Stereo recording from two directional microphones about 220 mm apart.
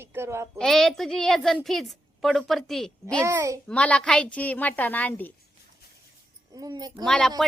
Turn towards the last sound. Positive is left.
turn(degrees=5)  # may be behind; listen again after turning